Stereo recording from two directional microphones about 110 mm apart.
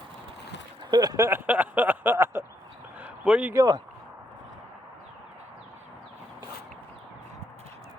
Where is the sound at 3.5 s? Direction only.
30° right (ahead or behind).